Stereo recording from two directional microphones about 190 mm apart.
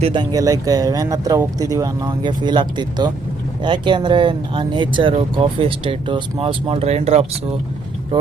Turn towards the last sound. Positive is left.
turn(degrees=-35)  # may be behind; listen again after turning